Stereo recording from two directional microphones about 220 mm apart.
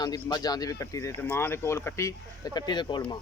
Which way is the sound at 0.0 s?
20° left (ahead or behind).